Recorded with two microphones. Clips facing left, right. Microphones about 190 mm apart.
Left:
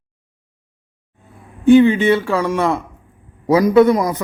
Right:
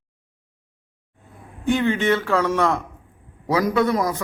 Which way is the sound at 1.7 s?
15° left (ahead or behind).